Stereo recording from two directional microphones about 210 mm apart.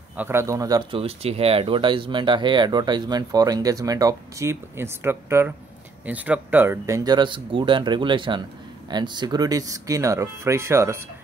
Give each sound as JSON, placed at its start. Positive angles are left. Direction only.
{"t": 0.1, "sound": "speech", "side_deg": -10}